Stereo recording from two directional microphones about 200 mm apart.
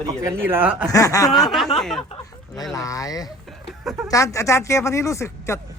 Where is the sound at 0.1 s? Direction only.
15° right (ahead or behind).